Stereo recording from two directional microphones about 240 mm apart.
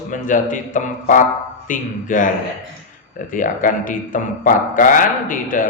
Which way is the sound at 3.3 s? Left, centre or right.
Left.